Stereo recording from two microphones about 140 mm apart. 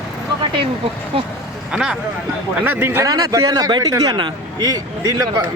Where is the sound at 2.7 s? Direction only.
15° right (ahead or behind).